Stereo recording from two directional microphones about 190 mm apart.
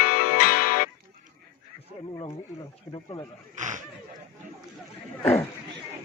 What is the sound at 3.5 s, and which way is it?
Speech, 40° right (ahead or behind).